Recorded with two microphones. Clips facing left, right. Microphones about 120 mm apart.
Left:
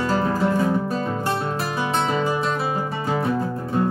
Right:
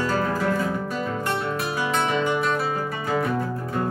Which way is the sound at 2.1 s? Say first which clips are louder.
Left 1 dB; 35° left (ahead or behind).